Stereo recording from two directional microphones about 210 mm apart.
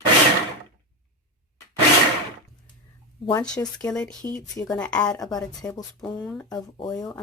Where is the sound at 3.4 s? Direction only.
5° left (ahead or behind).